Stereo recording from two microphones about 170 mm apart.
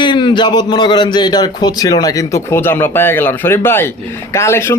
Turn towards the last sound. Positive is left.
turn(degrees=15)  # may be behind; listen again after turning